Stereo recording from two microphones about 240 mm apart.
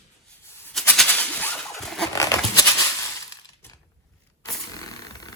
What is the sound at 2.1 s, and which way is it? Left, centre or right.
Goat, centre.